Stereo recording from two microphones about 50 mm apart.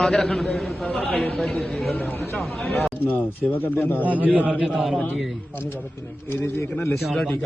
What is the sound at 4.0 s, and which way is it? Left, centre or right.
Speech, right.